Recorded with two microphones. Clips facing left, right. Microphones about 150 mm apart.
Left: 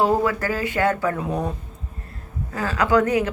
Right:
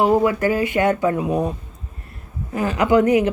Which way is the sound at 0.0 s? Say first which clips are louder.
Right 4 dB; 15° right (ahead or behind).